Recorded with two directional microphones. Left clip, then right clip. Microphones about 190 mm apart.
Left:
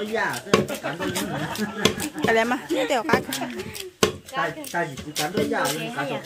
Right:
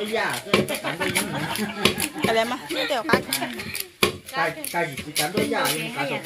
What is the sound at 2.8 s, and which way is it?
Chopping, 45° left (ahead or behind).